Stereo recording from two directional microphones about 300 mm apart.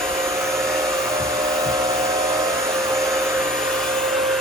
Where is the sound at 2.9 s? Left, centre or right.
Centre.